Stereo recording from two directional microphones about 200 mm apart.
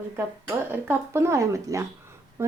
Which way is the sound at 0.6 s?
10° right (ahead or behind).